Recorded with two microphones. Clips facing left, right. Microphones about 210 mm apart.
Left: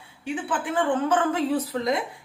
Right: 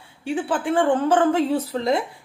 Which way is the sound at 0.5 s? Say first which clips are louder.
Right 5 dB; 30° right (ahead or behind).